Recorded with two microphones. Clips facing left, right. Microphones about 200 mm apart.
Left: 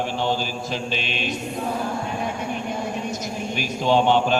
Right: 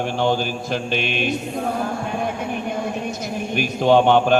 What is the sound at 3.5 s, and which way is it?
Speech, 55° right (ahead or behind).